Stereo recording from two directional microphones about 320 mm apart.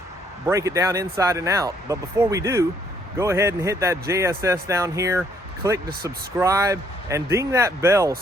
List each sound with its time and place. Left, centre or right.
0.4 s speech: centre